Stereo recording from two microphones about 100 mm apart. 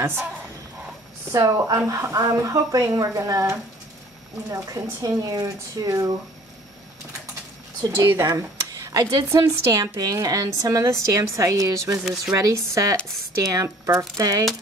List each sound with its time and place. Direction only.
0.0 s speech: 25° right (ahead or behind)
1.3 s a woman's voice: 30° right (ahead or behind)
7.8 s a woman's voice: 30° right (ahead or behind)
12.0 s speech: 5° right (ahead or behind)
12.4 s a woman's voice: 35° right (ahead or behind)